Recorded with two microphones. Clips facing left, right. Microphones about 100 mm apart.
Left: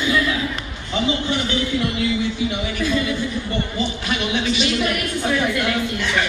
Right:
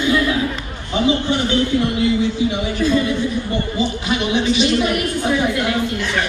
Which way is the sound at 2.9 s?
20° right (ahead or behind).